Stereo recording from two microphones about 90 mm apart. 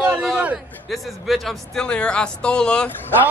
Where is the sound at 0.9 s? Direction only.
Centre (ahead or behind).